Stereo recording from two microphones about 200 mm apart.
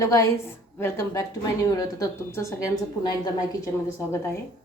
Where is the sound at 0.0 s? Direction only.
15° left (ahead or behind).